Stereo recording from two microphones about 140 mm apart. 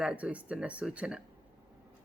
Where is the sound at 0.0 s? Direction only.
10° right (ahead or behind).